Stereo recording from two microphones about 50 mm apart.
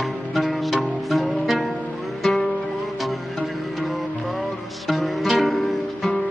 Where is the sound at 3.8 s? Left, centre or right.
Centre.